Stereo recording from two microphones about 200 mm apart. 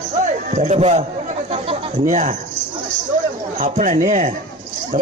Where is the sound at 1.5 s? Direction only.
30° right (ahead or behind).